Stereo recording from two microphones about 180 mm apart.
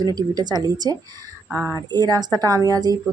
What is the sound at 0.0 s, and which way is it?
Speech, 20° right (ahead or behind).